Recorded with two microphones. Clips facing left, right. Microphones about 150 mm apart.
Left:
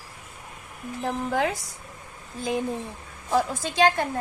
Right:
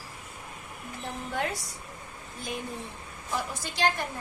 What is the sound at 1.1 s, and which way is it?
Speech, 90° left.